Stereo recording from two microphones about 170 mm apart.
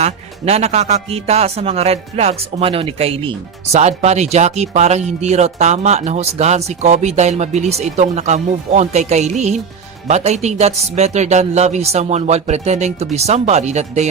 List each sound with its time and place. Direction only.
0.0 s a man's voice: 40° right (ahead or behind)